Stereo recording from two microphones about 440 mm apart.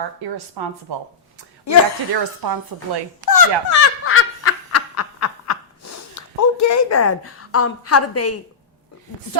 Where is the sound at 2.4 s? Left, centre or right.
Right.